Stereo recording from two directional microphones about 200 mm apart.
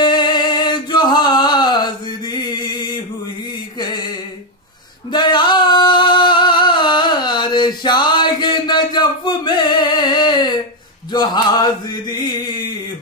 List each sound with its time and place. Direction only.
0.0 s a sound: 20° left (ahead or behind)
5.1 s singing: 20° left (ahead or behind)
11.1 s mantra: 20° left (ahead or behind)